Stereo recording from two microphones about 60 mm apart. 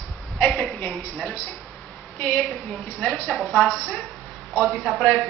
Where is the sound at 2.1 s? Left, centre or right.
Left.